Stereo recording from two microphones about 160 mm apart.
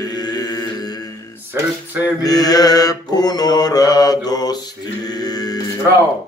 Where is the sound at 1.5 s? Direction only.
15° right (ahead or behind).